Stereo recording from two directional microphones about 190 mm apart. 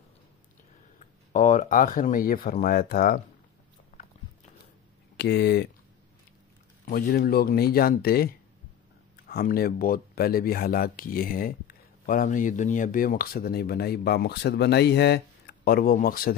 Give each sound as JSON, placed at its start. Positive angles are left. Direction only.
{"t": 0.9, "sound": "speech", "side_deg": 40}
{"t": 3.9, "sound": "biting", "side_deg": 50}
{"t": 5.1, "sound": "speech", "side_deg": 60}
{"t": 6.9, "sound": "speech", "side_deg": 50}
{"t": 9.3, "sound": "speech", "side_deg": 55}